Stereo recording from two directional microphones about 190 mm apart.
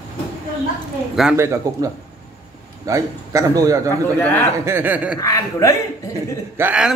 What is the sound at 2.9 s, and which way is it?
Speech, 20° right (ahead or behind).